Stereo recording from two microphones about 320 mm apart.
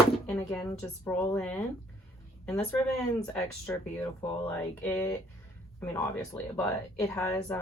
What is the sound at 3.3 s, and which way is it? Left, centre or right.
Speech, centre.